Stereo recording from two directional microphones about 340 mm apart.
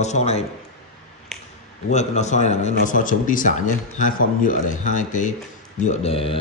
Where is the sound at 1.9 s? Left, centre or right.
Centre.